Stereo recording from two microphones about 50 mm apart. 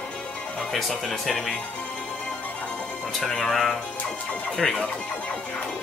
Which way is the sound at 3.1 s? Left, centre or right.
Centre.